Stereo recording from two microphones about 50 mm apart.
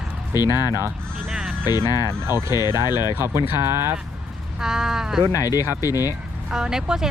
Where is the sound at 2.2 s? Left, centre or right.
Right.